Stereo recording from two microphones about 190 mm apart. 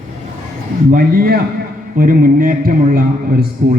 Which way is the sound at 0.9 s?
50° right (ahead or behind).